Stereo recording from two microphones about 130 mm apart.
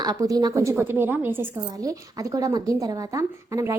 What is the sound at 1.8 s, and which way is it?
A woman's voice, 25° right (ahead or behind).